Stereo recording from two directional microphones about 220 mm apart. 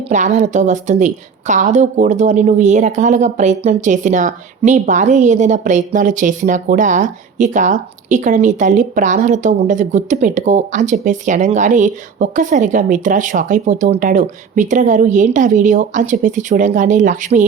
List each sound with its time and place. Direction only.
0.1 s a woman's voice: 35° right (ahead or behind)